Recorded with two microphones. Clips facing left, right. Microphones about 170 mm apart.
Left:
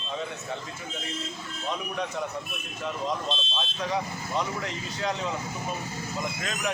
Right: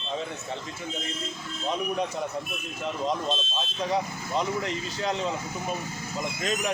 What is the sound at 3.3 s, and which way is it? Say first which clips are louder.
Speech: right 2 dB; 45° right (ahead or behind).